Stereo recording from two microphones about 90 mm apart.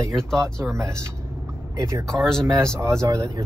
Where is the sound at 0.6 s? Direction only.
35° right (ahead or behind).